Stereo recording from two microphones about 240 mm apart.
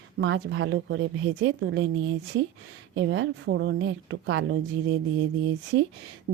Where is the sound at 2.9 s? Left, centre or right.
Right.